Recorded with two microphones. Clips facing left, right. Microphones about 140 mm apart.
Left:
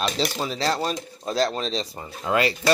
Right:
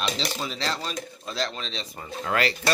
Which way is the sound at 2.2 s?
20° left (ahead or behind).